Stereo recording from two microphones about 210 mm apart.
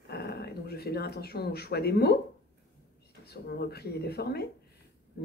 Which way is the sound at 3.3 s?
50° left (ahead or behind).